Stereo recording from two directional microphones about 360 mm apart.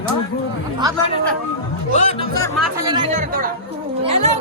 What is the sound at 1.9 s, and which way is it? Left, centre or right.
Speech, centre.